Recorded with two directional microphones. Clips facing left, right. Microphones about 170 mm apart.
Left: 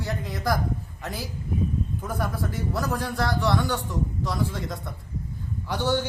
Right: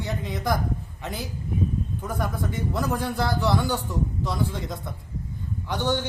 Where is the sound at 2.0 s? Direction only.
5° left (ahead or behind).